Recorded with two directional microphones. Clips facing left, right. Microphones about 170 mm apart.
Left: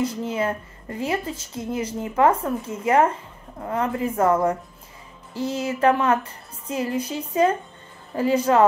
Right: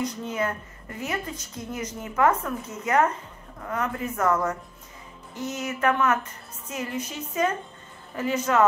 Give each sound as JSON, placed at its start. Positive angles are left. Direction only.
{"t": 0.2, "sound": "speech", "side_deg": 30}